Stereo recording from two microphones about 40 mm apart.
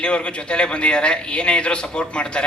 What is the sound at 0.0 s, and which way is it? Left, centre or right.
A man's voice, left.